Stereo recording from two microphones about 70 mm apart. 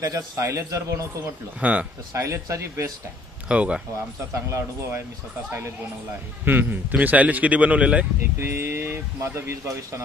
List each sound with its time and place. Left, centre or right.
0.0 s a man's voice: right
1.6 s speech: right
2.1 s a man's voice: right
3.4 s speech: centre
4.3 s a man's voice: right
6.4 s speech: right
8.4 s speech: right